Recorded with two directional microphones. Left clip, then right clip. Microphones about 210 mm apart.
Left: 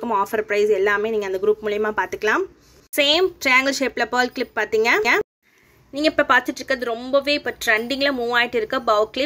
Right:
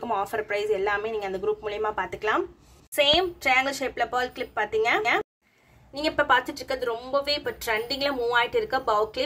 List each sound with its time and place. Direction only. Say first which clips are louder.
0.0 s speech: left 6 dB; 10° left (ahead or behind)